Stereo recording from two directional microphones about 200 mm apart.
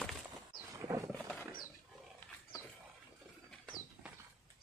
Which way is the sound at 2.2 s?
10° left (ahead or behind).